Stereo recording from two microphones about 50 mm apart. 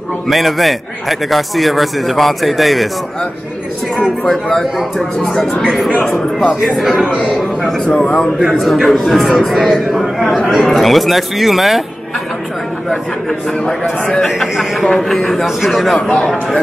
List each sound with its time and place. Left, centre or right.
0.3 s a man's voice: centre
4.2 s a man's voice: centre
6.6 s a man's voice: centre
7.2 s a man's voice: centre
7.8 s speech: left
8.4 s a man's voice: centre
12.9 s a man's voice: centre
14.5 s a man's voice: centre